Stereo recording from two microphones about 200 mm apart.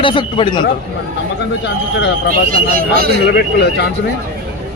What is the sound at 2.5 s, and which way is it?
Speech, 45° right (ahead or behind).